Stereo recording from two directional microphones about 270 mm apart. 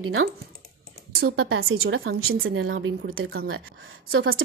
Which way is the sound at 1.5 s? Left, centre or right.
Right.